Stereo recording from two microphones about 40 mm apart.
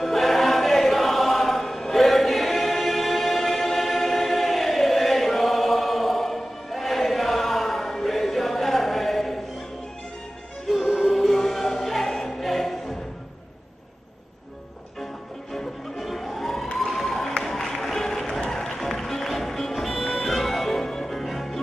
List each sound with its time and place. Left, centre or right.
0.0 s choir: centre
10.9 s music: centre
15.5 s music: centre
16.9 s a sound: centre
17.4 s music: centre